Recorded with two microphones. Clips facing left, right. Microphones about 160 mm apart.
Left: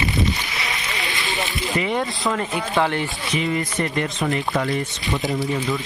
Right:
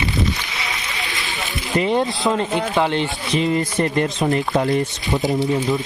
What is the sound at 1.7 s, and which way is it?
Speech, 30° right (ahead or behind).